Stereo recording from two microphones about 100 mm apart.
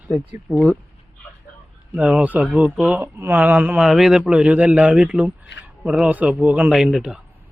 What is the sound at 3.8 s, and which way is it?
A man's voice, 5° right (ahead or behind).